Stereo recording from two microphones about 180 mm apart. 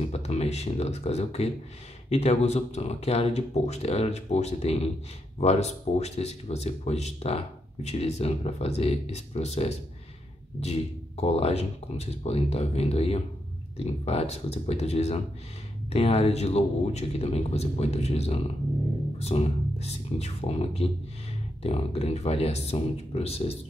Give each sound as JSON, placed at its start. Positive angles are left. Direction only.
{"t": 0.0, "sound": "speech", "side_deg": 35}